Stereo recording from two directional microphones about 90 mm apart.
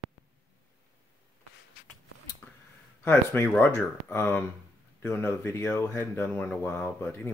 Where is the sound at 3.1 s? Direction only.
25° left (ahead or behind).